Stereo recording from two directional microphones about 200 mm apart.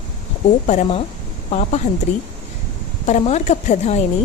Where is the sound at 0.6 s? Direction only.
35° left (ahead or behind).